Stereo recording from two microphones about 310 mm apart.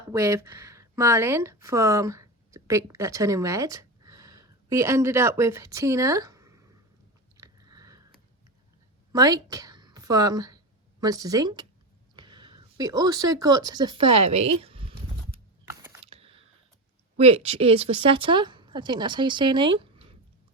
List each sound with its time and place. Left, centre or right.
0.1 s speech: centre
7.3 s biting: centre
9.1 s a woman's voice: centre
16.0 s a sound: centre
17.2 s speech: centre